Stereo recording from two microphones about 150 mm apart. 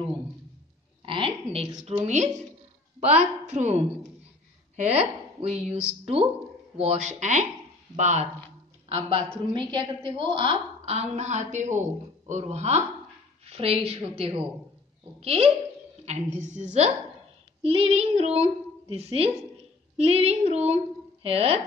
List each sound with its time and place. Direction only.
1.0 s a sound: 35° right (ahead or behind)
1.9 s speech: 45° right (ahead or behind)
5.6 s speech: 5° right (ahead or behind)
6.8 s a woman's voice: 50° right (ahead or behind)
17.6 s a woman's voice: 40° right (ahead or behind)